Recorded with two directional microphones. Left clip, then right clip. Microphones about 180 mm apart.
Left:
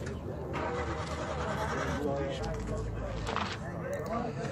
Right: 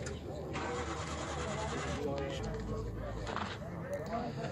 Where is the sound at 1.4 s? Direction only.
50° right (ahead or behind).